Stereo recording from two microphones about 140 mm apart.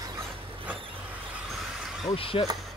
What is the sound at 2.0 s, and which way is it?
Speech, 40° left (ahead or behind).